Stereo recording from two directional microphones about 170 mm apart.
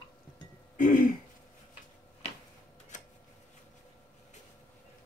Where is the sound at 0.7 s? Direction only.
50° left (ahead or behind).